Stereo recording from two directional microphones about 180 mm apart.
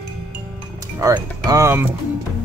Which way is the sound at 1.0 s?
20° right (ahead or behind).